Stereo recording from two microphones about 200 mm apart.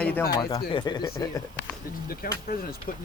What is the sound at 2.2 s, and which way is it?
Speech, 45° left (ahead or behind).